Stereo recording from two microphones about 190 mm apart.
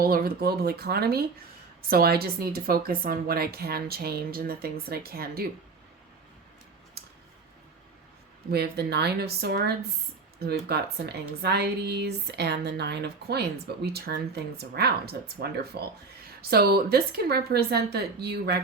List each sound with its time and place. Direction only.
0.0 s speech: 50° right (ahead or behind)
8.4 s speech: 60° right (ahead or behind)